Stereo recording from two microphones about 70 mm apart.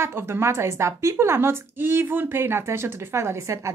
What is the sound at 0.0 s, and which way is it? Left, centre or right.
Speech, right.